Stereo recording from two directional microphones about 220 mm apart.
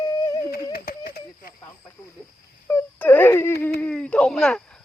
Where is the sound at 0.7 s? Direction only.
45° left (ahead or behind).